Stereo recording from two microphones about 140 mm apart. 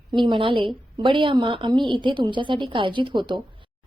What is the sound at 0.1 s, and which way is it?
A woman's voice, 35° right (ahead or behind).